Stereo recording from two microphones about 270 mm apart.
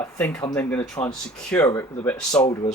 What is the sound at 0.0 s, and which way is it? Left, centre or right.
Speech, centre.